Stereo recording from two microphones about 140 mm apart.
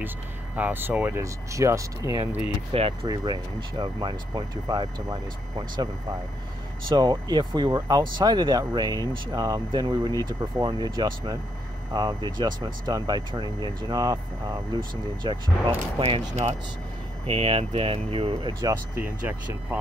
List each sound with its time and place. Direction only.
0.6 s speech: 15° right (ahead or behind)
2.7 s speech: 45° right (ahead or behind)
3.1 s speech: 30° right (ahead or behind)
17.3 s speech: 45° right (ahead or behind)
18.6 s speech: 25° right (ahead or behind)
19.0 s speech: 10° right (ahead or behind)